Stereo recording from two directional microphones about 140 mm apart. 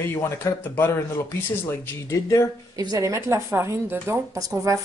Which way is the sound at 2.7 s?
25° right (ahead or behind).